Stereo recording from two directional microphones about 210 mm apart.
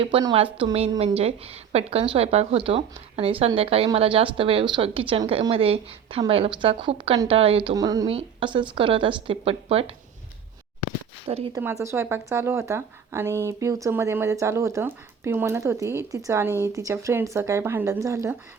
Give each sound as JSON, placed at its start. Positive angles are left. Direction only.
{"t": 0.0, "sound": "speech", "side_deg": -20}
{"t": 11.3, "sound": "speech", "side_deg": -30}
{"t": 11.5, "sound": "speech", "side_deg": -15}